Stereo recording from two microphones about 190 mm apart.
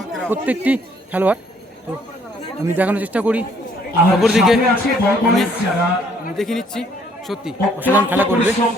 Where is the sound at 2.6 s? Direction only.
10° right (ahead or behind).